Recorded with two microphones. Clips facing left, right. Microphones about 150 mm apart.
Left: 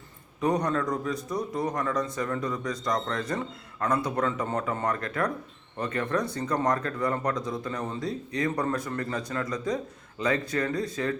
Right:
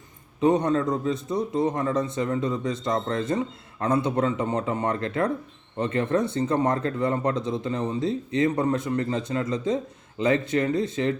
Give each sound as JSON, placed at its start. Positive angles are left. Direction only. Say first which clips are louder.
{"t": 0.3, "sound": "speech", "louder": "right 5 dB", "side_deg": -25}